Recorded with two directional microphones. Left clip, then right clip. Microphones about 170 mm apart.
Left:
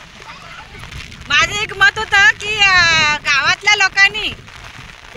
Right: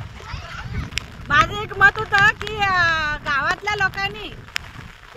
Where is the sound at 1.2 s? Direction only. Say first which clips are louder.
Left 3 dB; 15° left (ahead or behind).